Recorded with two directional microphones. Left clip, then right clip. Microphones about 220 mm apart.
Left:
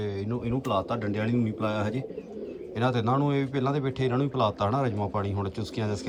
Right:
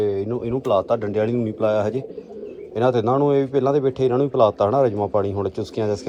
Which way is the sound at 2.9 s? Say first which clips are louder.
Right 9 dB; 30° left (ahead or behind).